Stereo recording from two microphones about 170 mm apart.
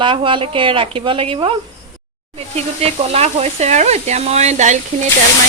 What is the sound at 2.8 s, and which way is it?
Sizzle, 35° right (ahead or behind).